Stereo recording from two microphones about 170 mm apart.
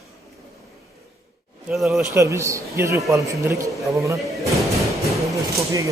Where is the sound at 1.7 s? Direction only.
Centre (ahead or behind).